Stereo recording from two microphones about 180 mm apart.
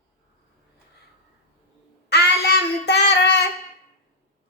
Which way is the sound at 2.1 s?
65° left (ahead or behind).